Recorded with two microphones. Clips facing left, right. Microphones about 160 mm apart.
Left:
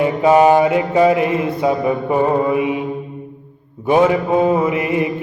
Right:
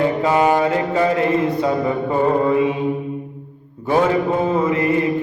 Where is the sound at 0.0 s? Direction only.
20° left (ahead or behind).